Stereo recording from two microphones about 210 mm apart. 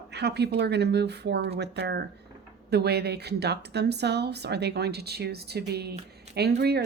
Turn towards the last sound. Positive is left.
turn(degrees=-50)  # may be behind; listen again after turning